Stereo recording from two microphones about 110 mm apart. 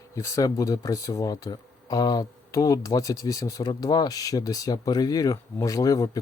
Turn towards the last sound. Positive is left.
turn(degrees=35)  # may be behind; listen again after turning